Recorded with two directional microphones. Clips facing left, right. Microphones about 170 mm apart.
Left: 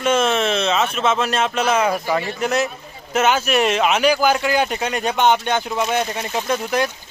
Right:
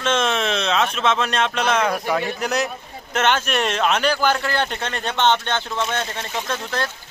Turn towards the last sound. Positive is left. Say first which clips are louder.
# left 5 dB
turn(degrees=15)  # may be behind; listen again after turning